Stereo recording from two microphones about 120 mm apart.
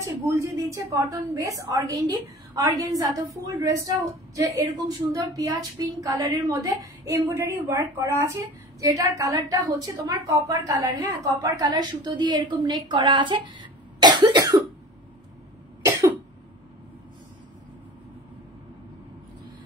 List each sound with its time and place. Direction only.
0.0 s a woman's voice: 25° right (ahead or behind)